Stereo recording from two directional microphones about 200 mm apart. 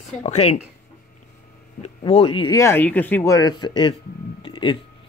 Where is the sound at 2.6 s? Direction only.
10° left (ahead or behind).